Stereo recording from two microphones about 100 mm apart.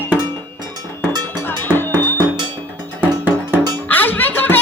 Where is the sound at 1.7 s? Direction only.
20° left (ahead or behind).